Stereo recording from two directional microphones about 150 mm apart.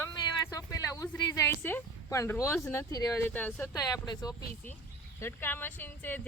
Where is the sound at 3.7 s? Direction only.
25° left (ahead or behind).